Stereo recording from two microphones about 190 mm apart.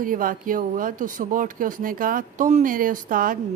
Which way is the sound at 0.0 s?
45° right (ahead or behind).